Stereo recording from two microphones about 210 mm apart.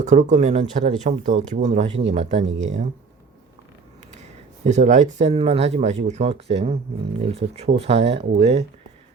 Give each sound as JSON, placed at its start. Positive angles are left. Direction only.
{"t": 0.0, "sound": "speech", "side_deg": -35}
{"t": 4.6, "sound": "speech", "side_deg": -35}